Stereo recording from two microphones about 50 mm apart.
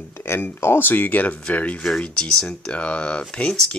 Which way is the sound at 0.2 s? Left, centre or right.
Left.